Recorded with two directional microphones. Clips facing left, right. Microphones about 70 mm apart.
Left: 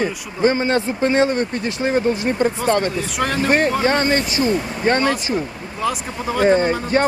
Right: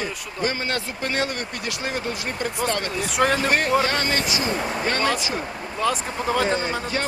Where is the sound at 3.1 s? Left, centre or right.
Centre.